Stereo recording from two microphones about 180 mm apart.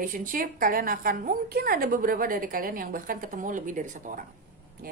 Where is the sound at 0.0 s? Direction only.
50° right (ahead or behind).